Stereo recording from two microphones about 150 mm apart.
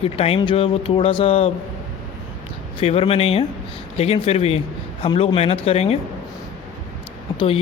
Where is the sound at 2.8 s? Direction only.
40° left (ahead or behind).